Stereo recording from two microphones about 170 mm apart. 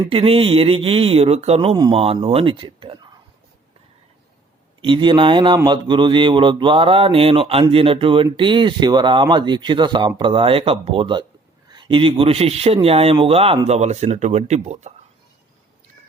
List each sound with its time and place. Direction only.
0.0 s speech: 30° right (ahead or behind)
4.8 s speech: 30° right (ahead or behind)